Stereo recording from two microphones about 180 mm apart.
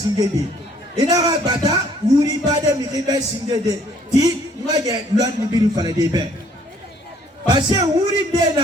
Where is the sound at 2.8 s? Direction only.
20° right (ahead or behind).